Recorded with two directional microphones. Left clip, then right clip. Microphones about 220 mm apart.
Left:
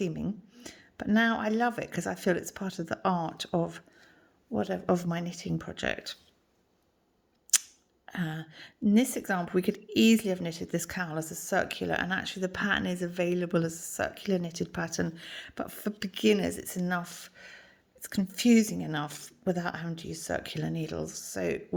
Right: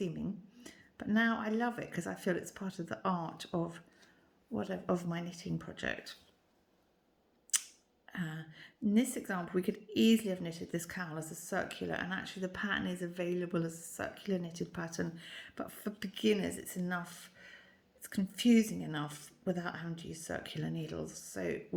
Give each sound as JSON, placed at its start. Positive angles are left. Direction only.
{"t": 0.0, "sound": "a woman's voice", "side_deg": 40}
{"t": 7.5, "sound": "camera", "side_deg": 40}
{"t": 8.0, "sound": "a woman's voice", "side_deg": 40}